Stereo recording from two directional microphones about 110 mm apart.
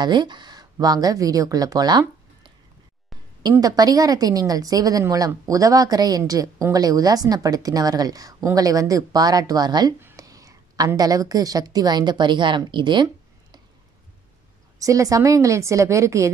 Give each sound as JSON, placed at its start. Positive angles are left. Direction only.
{"t": 0.0, "sound": "speech", "side_deg": -40}
{"t": 3.5, "sound": "a woman's voice", "side_deg": -35}
{"t": 9.9, "sound": "whispering", "side_deg": -20}
{"t": 10.2, "sound": "whispering", "side_deg": -30}
{"t": 11.0, "sound": "a woman's voice", "side_deg": -35}
{"t": 14.8, "sound": "a woman's voice", "side_deg": -30}